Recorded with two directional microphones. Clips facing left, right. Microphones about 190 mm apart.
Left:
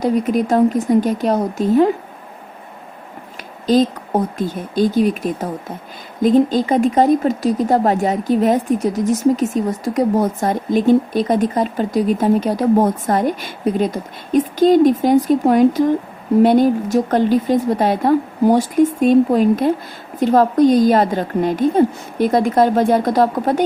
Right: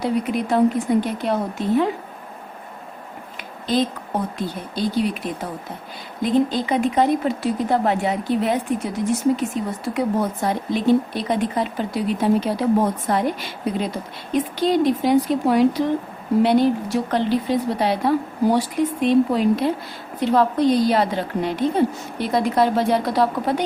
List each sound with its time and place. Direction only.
0.0 s speech: 45° left (ahead or behind)
3.7 s speech: 45° left (ahead or behind)